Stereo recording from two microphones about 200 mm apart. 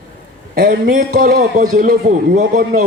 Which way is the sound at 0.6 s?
45° right (ahead or behind).